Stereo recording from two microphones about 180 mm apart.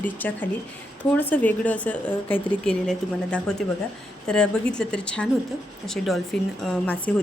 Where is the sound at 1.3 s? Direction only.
10° left (ahead or behind).